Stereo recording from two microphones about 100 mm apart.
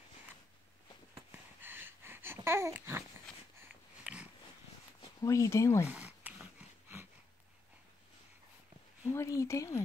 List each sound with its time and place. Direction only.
1.6 s wheeze: 20° right (ahead or behind)
4.0 s dog: 5° right (ahead or behind)
5.2 s speech: 35° left (ahead or behind)
5.9 s a sound: 10° right (ahead or behind)
9.1 s speech: 30° left (ahead or behind)